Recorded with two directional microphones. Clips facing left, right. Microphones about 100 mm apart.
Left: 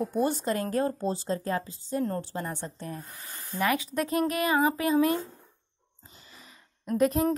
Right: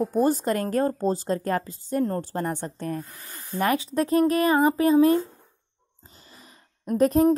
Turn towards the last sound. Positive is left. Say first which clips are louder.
# right 4 dB
turn(degrees=-40)  # may be behind; listen again after turning